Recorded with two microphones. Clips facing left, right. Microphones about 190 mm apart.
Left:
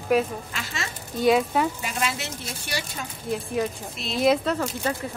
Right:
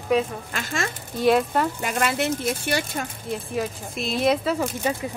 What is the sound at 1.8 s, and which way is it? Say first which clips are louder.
Speech: right 6 dB; 55° right (ahead or behind).